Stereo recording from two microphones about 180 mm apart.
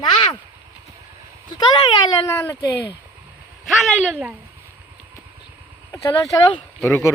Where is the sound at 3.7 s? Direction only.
Centre (ahead or behind).